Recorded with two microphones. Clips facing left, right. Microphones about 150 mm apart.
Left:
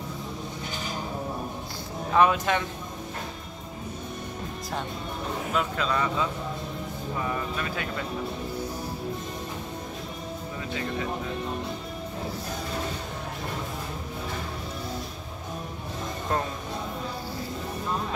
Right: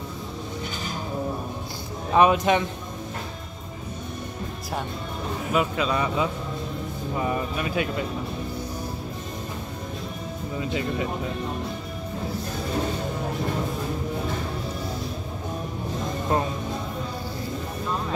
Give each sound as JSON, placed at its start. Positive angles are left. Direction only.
{"t": 2.1, "sound": "speech", "side_deg": -20}
{"t": 5.5, "sound": "speech", "side_deg": -10}
{"t": 10.6, "sound": "speech", "side_deg": -20}